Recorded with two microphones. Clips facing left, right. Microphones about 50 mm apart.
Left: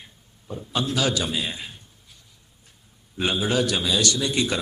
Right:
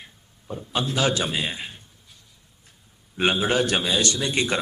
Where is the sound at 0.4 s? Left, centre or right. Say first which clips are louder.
Right 1 dB; centre.